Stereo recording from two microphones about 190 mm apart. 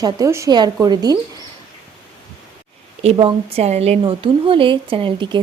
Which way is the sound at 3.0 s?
30° right (ahead or behind).